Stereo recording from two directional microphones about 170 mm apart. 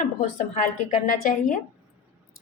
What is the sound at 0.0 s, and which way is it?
Speech, 50° left (ahead or behind).